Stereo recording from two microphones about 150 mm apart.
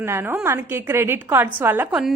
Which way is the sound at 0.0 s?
15° right (ahead or behind).